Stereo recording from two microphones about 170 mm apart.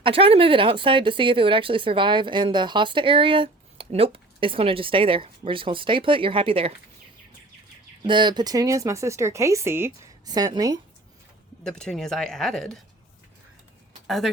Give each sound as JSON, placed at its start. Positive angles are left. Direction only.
{"t": 0.0, "sound": "speech", "side_deg": -30}
{"t": 8.0, "sound": "speech", "side_deg": -25}
{"t": 11.6, "sound": "speech", "side_deg": 5}